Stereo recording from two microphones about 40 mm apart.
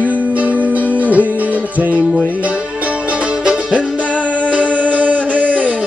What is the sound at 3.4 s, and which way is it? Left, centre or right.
Music, right.